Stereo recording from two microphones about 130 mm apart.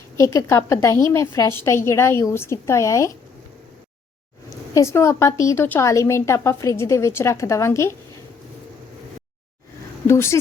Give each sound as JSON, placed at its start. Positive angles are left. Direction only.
{"t": 0.2, "sound": "speech", "side_deg": 25}
{"t": 4.4, "sound": "speech", "side_deg": 25}
{"t": 10.1, "sound": "speech", "side_deg": 20}